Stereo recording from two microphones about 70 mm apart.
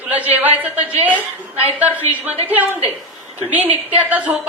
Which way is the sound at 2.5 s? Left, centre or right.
Right.